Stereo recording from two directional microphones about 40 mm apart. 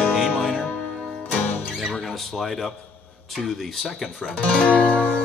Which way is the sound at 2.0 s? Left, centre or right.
Centre.